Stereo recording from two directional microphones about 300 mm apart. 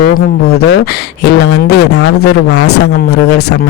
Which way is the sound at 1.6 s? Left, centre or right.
Left.